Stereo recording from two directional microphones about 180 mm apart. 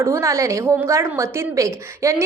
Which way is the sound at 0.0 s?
15° right (ahead or behind).